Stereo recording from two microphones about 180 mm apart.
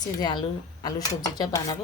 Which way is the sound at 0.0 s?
25° left (ahead or behind).